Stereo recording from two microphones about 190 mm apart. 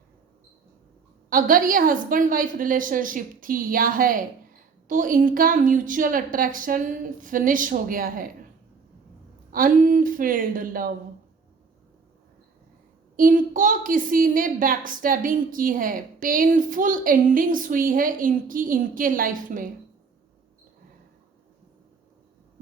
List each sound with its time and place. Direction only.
1.3 s a woman's voice: 45° right (ahead or behind)
9.5 s a woman's voice: 45° right (ahead or behind)
13.1 s a woman's voice: 45° right (ahead or behind)